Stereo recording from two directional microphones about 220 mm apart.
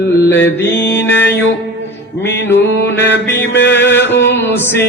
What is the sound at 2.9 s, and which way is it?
Mantra, 50° left (ahead or behind).